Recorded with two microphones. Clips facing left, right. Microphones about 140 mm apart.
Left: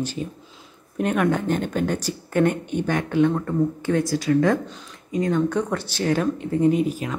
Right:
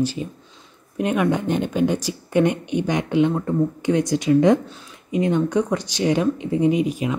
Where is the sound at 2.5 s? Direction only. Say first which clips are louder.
Right 1 dB; 45° left (ahead or behind).